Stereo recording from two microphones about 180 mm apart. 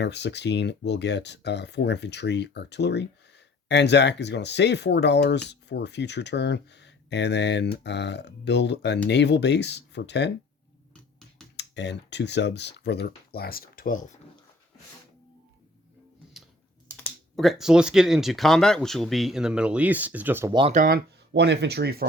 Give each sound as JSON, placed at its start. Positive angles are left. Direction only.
{"t": 0.0, "sound": "speech", "side_deg": 70}
{"t": 11.5, "sound": "speech", "side_deg": 75}
{"t": 16.4, "sound": "typing", "side_deg": 0}
{"t": 17.3, "sound": "speech", "side_deg": 0}
{"t": 20.5, "sound": "speech", "side_deg": -25}
{"t": 20.7, "sound": "speech", "side_deg": -55}